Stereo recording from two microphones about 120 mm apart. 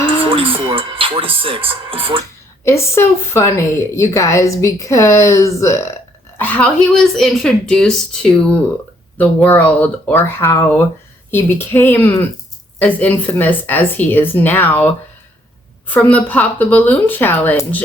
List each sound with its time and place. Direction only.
0.3 s speech: 50° right (ahead or behind)
2.6 s a woman's voice: 20° left (ahead or behind)